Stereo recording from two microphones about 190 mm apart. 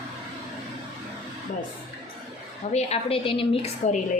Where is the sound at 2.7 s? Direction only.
30° left (ahead or behind).